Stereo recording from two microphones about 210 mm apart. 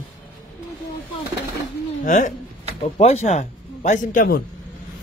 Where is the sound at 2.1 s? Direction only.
35° left (ahead or behind).